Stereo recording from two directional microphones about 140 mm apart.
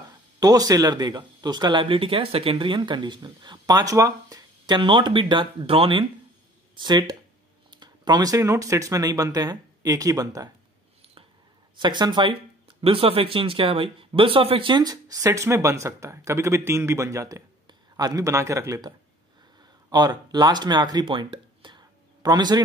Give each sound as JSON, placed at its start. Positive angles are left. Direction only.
{"t": 0.4, "sound": "speech", "side_deg": -25}
{"t": 11.7, "sound": "speech", "side_deg": -35}